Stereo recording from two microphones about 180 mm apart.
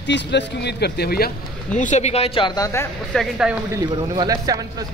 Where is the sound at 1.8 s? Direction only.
40° left (ahead or behind); by 2.9 s 15° left (ahead or behind).